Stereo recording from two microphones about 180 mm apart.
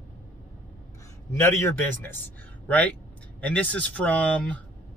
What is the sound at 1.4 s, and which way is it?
Speech, 15° left (ahead or behind).